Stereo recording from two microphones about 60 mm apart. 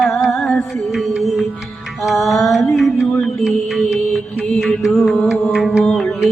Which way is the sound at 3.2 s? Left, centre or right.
Centre.